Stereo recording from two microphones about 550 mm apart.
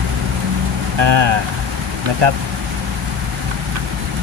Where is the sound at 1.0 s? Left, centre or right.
Right.